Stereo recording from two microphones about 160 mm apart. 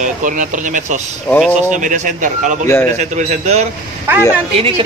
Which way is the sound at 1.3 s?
10° left (ahead or behind).